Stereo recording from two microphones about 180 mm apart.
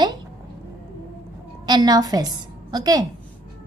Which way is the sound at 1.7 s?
20° right (ahead or behind).